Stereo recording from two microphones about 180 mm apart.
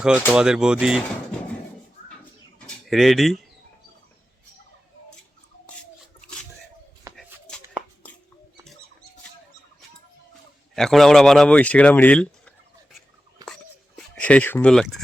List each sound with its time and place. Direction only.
0.3 s speech: 5° right (ahead or behind)
2.6 s speech: centre (ahead or behind)
7.1 s a sound: 20° right (ahead or behind)
7.4 s chopping: centre (ahead or behind)
10.8 s speech: centre (ahead or behind)
13.4 s a sound: centre (ahead or behind)